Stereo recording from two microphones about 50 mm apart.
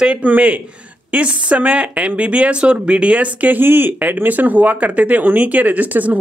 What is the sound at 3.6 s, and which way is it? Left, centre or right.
Speech, right.